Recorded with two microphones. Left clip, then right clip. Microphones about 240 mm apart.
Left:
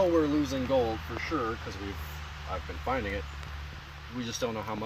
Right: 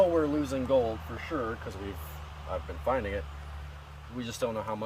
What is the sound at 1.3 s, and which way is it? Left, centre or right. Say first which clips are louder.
Speech: left 1 dB; right.